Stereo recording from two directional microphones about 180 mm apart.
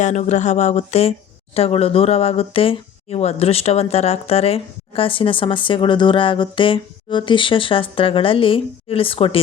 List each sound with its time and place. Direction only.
0.0 s speech: 40° left (ahead or behind)